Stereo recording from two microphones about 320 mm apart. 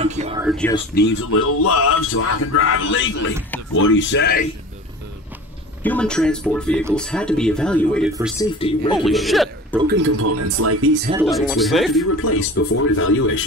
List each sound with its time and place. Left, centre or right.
0.0 s speech: right
0.5 s speech: centre
1.3 s a man's voice: left
5.8 s speech: centre
8.5 s speech: centre
8.9 s a man's voice: centre
9.8 s speech: right
10.2 s speech: right
11.1 s speech: centre
12.3 s speech: left